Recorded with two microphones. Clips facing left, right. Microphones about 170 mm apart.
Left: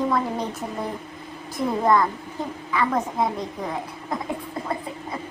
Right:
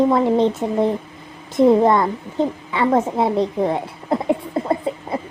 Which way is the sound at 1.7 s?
25° right (ahead or behind).